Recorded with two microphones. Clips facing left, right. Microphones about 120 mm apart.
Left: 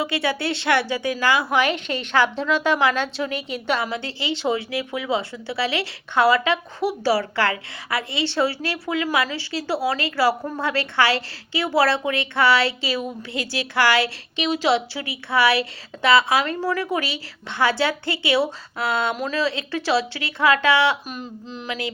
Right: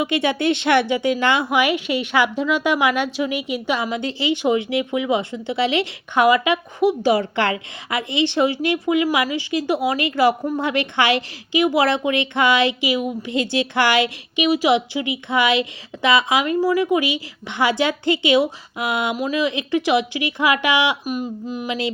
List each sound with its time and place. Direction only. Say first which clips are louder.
0.0 s a woman's voice: right 4 dB; 20° right (ahead or behind)
1.5 s a woman's voice: right 2 dB; 15° right (ahead or behind)